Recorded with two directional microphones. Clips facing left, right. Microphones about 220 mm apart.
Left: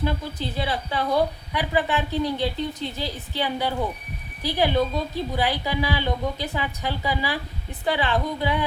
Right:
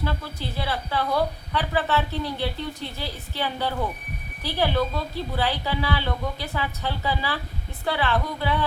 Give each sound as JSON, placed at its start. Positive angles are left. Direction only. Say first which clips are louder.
{"t": 0.0, "sound": "a woman's voice", "louder": "left 3 dB", "side_deg": 20}